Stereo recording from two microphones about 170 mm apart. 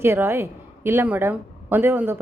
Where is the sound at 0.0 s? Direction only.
15° right (ahead or behind).